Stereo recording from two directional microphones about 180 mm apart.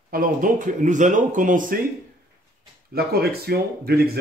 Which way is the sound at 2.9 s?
60° right (ahead or behind).